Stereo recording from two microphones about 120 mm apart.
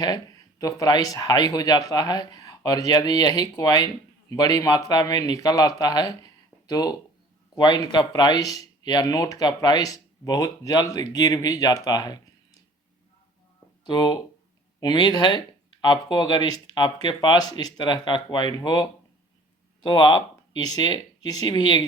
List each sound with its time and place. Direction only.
0.6 s speech: 30° left (ahead or behind)
13.8 s speech: 35° left (ahead or behind)